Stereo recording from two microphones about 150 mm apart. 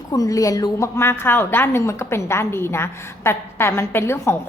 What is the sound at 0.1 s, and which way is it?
A woman's voice, 25° left (ahead or behind).